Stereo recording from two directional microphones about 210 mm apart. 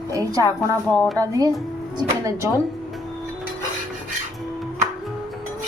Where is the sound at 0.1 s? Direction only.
15° right (ahead or behind).